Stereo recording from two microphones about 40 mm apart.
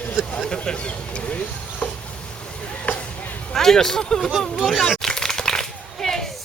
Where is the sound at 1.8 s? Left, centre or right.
Left.